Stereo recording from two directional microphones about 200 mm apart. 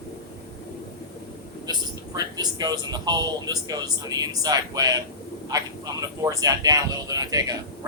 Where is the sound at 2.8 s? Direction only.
20° right (ahead or behind).